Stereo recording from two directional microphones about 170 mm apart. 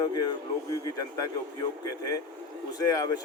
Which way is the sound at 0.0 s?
25° left (ahead or behind).